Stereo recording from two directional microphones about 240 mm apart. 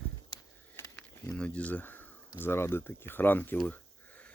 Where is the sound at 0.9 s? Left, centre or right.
Centre.